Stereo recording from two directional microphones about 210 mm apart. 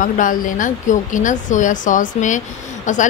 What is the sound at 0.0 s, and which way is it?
Speech, 40° left (ahead or behind).